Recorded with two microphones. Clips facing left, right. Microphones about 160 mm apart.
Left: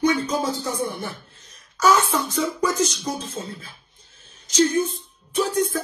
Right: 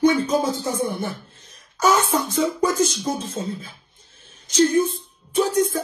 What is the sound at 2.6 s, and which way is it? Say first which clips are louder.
Speech: right 2 dB; 50° right (ahead or behind).